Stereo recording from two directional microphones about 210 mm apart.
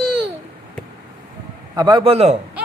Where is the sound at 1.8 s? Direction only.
25° right (ahead or behind).